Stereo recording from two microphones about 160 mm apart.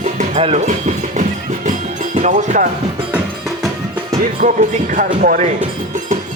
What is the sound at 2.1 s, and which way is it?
Speech, 50° right (ahead or behind).